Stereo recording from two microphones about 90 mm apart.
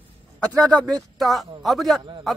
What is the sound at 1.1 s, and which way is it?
Speech, centre (ahead or behind).